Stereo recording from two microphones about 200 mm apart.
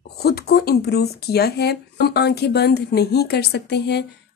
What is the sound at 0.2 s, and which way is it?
Speech, 50° left (ahead or behind).